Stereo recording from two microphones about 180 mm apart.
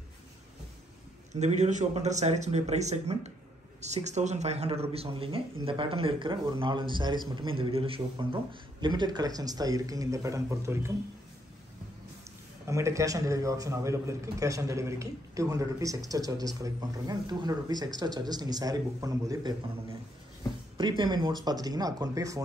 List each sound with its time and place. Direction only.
1.3 s a man's voice: 40° right (ahead or behind); by 10.9 s 15° right (ahead or behind)
12.6 s a man's voice: 15° right (ahead or behind)
20.7 s a man's voice: 25° right (ahead or behind)